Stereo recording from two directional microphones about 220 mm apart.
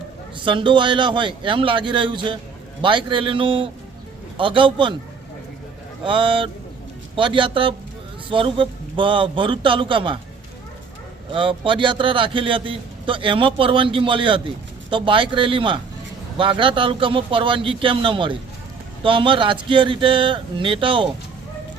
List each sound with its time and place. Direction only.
0.4 s a man's voice: 20° right (ahead or behind)
6.1 s a man's voice: 20° right (ahead or behind)
11.3 s a man's voice: 25° right (ahead or behind)